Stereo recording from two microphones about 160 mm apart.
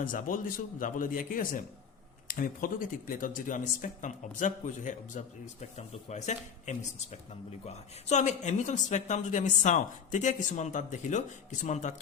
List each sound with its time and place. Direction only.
0.0 s speech: 60° left (ahead or behind)